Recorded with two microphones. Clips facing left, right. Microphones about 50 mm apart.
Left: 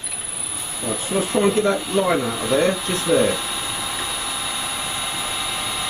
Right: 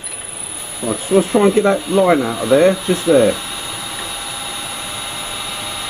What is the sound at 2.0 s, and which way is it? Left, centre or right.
Speech, centre.